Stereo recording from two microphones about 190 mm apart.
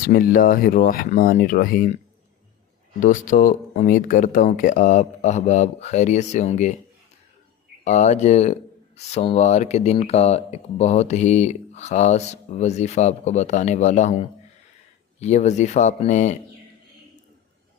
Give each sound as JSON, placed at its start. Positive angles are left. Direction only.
{"t": 0.1, "sound": "speech", "side_deg": 50}
{"t": 3.0, "sound": "speech", "side_deg": 45}
{"t": 7.9, "sound": "speech", "side_deg": 35}